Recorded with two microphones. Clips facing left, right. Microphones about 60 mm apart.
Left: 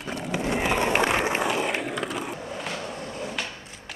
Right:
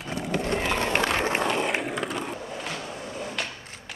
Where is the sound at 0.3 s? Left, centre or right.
Centre.